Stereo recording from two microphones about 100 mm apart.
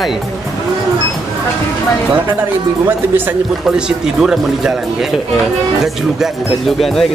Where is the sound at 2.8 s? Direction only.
20° right (ahead or behind).